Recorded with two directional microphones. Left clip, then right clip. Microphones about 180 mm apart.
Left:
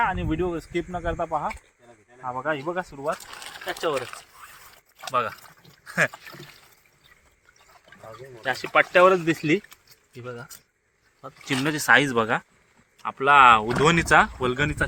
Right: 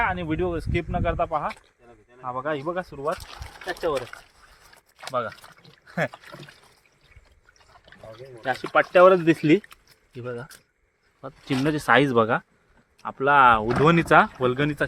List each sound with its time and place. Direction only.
0.0 s speech: 35° right (ahead or behind)
1.1 s speech: 15° right (ahead or behind)
2.2 s speech: 30° right (ahead or behind)
2.6 s speech: 45° right (ahead or behind)
3.7 s speech: 10° right (ahead or behind)
4.9 s speech: 20° right (ahead or behind)
8.6 s speech: 35° right (ahead or behind)